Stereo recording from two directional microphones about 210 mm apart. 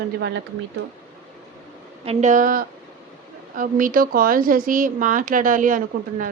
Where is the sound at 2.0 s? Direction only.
35° right (ahead or behind).